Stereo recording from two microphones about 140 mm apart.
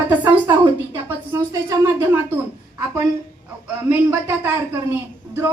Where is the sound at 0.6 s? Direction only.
15° right (ahead or behind).